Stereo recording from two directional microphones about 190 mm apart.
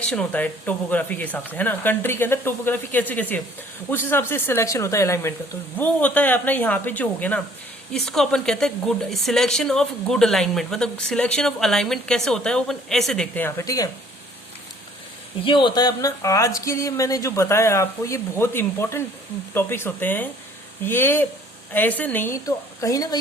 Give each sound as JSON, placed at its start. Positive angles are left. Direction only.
{"t": 0.0, "sound": "speech", "side_deg": 5}
{"t": 15.4, "sound": "speech", "side_deg": 25}